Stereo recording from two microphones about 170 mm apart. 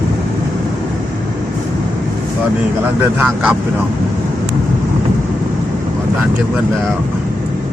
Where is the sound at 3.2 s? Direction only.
5° right (ahead or behind).